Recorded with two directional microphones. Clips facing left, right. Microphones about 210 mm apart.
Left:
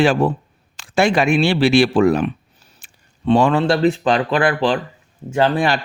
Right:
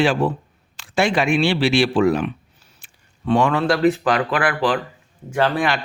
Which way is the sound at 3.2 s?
30° left (ahead or behind).